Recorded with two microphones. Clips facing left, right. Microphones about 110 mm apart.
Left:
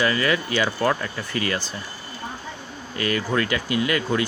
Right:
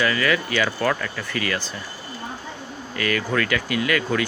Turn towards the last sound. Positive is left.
turn(degrees=25)  # may be behind; listen again after turning